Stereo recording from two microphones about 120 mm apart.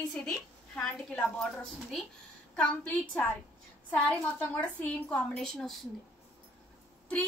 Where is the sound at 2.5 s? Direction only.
10° left (ahead or behind).